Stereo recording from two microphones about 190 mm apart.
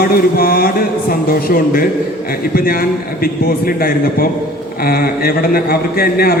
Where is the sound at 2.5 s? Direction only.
50° left (ahead or behind).